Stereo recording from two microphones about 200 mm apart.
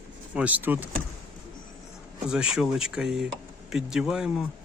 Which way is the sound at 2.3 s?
Centre (ahead or behind).